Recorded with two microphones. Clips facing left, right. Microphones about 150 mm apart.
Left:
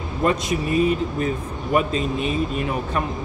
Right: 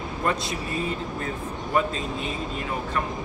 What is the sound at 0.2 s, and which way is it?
Speech, 20° left (ahead or behind).